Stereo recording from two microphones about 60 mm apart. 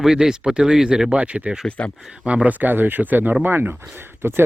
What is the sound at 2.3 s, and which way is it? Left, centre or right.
Speech, right.